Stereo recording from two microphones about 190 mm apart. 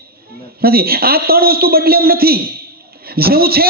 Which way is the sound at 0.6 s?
55° right (ahead or behind).